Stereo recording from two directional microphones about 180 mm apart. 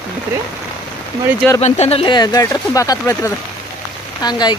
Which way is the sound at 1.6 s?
35° left (ahead or behind).